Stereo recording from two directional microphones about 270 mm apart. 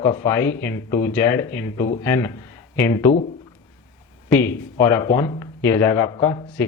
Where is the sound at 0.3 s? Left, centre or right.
Centre.